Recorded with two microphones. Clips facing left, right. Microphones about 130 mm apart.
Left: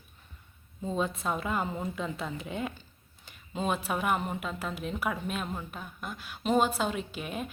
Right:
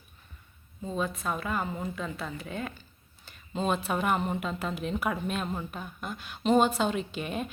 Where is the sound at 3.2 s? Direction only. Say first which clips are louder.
Right 2 dB; 10° left (ahead or behind).